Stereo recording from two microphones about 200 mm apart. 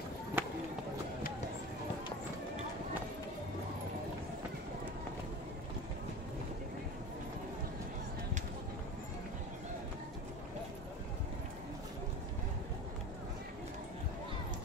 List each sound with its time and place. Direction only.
0.4 s run: 10° right (ahead or behind)